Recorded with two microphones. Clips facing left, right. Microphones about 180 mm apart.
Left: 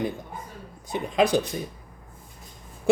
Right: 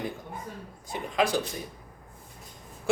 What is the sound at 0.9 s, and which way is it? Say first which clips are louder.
Speech: left 5 dB; 20° left (ahead or behind).